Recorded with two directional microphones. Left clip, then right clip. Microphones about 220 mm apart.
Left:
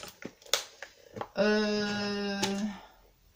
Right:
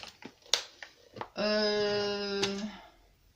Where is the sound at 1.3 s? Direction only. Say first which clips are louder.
Left 1 dB; 40° left (ahead or behind).